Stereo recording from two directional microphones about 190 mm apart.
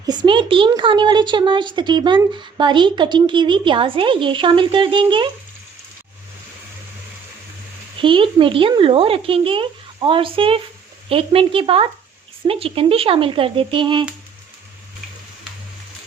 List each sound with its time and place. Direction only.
0.0 s a woman's voice: 20° right (ahead or behind)
8.0 s a woman's voice: 25° right (ahead or behind)